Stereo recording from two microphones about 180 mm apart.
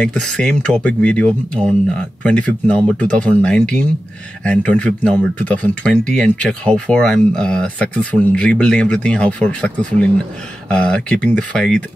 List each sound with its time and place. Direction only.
0.0 s speech: 5° left (ahead or behind)